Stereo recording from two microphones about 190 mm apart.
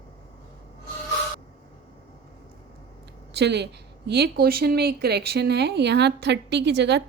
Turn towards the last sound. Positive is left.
turn(degrees=-65)  # may be behind; listen again after turning